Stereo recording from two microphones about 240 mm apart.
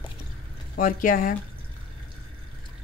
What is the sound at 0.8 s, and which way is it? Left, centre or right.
Speech, left.